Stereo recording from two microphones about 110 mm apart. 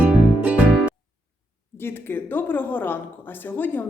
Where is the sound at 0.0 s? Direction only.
10° right (ahead or behind).